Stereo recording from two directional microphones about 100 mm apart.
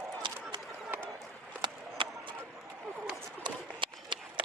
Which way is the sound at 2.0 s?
55° right (ahead or behind).